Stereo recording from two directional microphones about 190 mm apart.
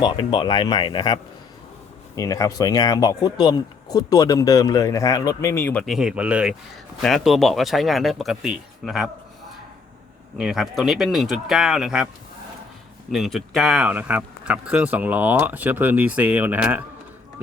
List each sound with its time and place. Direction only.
0.0 s speech: 25° left (ahead or behind)
5.8 s speech: centre (ahead or behind)
10.3 s speech: 5° right (ahead or behind)
13.1 s speech: centre (ahead or behind)